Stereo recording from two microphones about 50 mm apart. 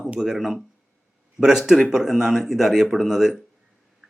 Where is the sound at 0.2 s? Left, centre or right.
Centre.